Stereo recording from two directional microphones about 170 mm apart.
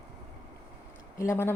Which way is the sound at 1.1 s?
15° left (ahead or behind).